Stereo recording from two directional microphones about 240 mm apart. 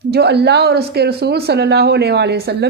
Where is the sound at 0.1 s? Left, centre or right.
Right.